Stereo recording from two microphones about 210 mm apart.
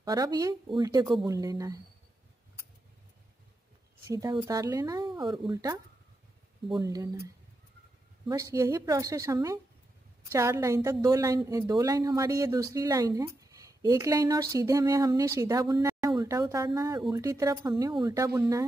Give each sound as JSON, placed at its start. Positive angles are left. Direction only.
{"t": 0.0, "sound": "a woman's voice", "side_deg": -20}
{"t": 4.0, "sound": "a woman's voice", "side_deg": -15}
{"t": 8.3, "sound": "a woman's voice", "side_deg": -15}
{"t": 15.7, "sound": "a sound", "side_deg": -15}
{"t": 16.2, "sound": "a woman's voice", "side_deg": -15}